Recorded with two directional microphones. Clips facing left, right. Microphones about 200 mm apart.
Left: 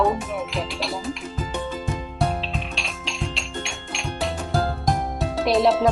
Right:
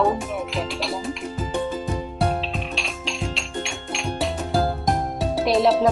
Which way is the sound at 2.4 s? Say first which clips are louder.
Right 2 dB; centre (ahead or behind).